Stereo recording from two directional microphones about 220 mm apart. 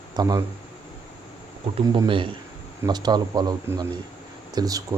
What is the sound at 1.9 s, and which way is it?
A man's voice, 20° right (ahead or behind).